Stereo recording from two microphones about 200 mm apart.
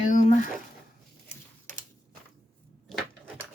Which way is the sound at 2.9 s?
Centre (ahead or behind).